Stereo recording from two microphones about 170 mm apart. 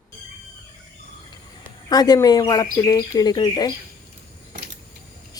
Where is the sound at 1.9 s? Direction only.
25° left (ahead or behind).